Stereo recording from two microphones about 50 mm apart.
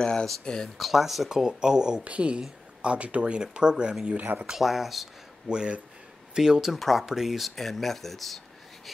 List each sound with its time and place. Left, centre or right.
0.0 s speech: centre
0.7 s speech: centre
1.4 s speech: centre
4.6 s speech: centre
5.5 s speech: centre